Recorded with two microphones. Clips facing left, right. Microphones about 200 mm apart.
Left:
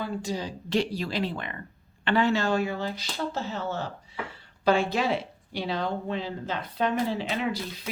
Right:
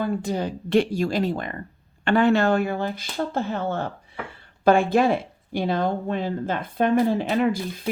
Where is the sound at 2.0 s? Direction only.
55° right (ahead or behind).